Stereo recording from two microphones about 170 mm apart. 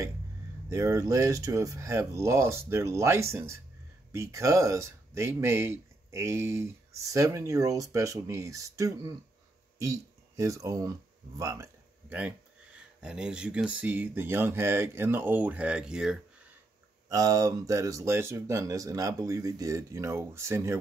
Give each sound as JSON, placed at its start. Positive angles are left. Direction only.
{"t": 0.7, "sound": "speech", "side_deg": -15}
{"t": 17.1, "sound": "speech", "side_deg": -20}